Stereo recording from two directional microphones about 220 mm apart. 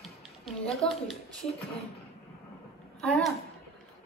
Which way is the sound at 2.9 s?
Centre (ahead or behind).